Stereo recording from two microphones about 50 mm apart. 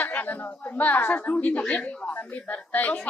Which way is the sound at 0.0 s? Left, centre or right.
Left.